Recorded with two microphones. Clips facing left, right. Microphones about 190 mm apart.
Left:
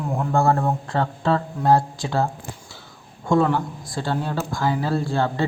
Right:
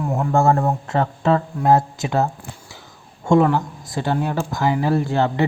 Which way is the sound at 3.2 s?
15° right (ahead or behind).